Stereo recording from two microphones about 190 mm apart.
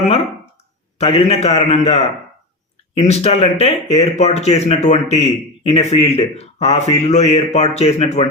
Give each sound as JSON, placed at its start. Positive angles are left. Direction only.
{"t": 0.9, "sound": "speech", "side_deg": 35}